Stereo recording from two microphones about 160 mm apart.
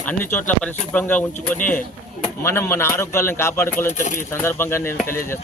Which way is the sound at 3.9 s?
50° left (ahead or behind).